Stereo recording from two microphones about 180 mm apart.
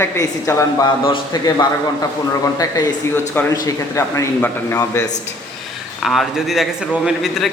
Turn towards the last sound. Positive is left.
turn(degrees=0)  # may be behind; listen again after turning